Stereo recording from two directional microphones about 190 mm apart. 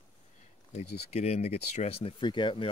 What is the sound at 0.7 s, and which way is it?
Speech, 35° left (ahead or behind).